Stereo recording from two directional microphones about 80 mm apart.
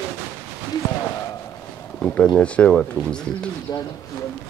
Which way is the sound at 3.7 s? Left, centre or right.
Left.